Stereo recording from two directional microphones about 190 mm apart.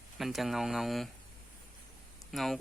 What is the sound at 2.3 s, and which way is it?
Speech, centre (ahead or behind).